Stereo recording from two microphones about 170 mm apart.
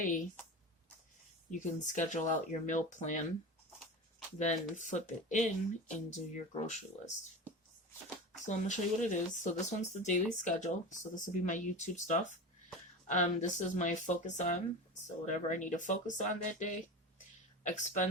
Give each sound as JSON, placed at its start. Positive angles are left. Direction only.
{"t": 1.5, "sound": "speech", "side_deg": 50}
{"t": 4.4, "sound": "speech", "side_deg": 45}
{"t": 8.4, "sound": "speech", "side_deg": 45}